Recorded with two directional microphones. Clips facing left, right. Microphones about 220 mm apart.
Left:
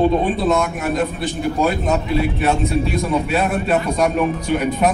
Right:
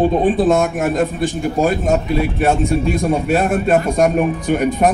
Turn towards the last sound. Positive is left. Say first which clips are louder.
# right 3 dB
turn(degrees=-50)  # may be behind; listen again after turning